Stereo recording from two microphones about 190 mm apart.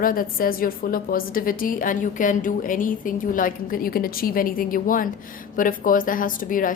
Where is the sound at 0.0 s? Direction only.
50° left (ahead or behind).